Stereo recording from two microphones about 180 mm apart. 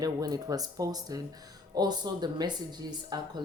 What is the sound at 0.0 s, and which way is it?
Speech, 20° right (ahead or behind).